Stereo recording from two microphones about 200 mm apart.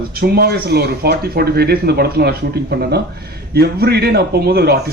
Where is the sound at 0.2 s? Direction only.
50° right (ahead or behind).